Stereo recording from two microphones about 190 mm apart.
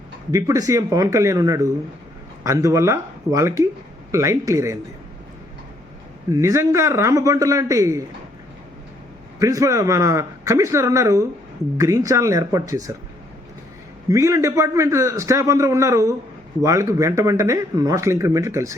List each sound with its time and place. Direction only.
0.3 s speech: 15° right (ahead or behind)
6.3 s speech: 15° right (ahead or behind)
9.4 s speech: 15° right (ahead or behind)
14.1 s speech: 15° right (ahead or behind)